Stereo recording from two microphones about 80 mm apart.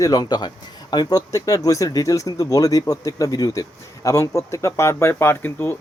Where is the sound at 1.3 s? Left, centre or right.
Left.